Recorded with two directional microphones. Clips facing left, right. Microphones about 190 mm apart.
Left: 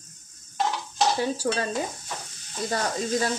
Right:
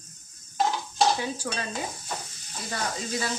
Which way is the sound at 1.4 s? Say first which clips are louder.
Left 7 dB; 40° left (ahead or behind).